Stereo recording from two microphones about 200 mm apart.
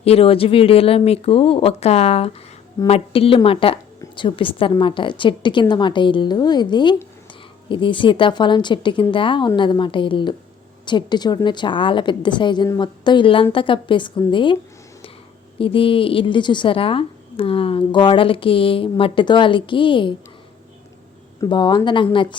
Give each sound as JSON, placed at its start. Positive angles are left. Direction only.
{"t": 0.0, "sound": "a woman's voice", "side_deg": 30}
{"t": 21.4, "sound": "a woman's voice", "side_deg": 20}